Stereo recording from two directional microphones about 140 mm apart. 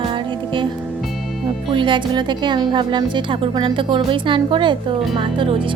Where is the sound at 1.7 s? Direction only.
35° right (ahead or behind).